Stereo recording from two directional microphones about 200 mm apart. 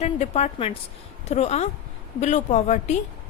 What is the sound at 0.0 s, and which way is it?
A woman's voice, 35° left (ahead or behind).